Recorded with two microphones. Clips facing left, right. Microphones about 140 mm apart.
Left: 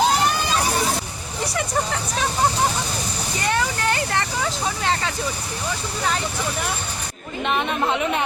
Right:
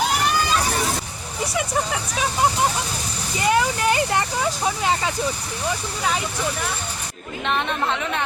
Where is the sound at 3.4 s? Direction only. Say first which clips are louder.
Right 4 dB; 10° right (ahead or behind).